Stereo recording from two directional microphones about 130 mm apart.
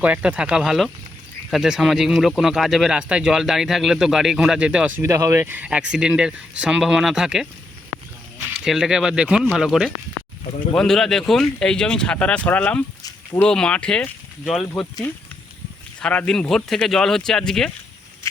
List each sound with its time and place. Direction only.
0.0 s speech: 10° right (ahead or behind)
8.5 s speech: 5° right (ahead or behind)